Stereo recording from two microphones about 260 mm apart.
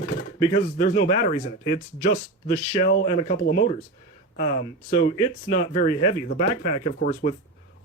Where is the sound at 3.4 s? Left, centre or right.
Left.